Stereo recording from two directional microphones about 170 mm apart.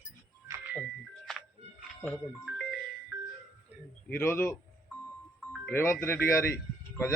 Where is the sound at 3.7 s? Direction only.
10° right (ahead or behind).